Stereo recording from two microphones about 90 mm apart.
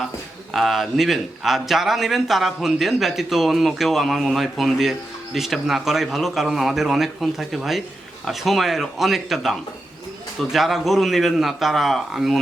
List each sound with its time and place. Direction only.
0.5 s a man's voice: centre (ahead or behind)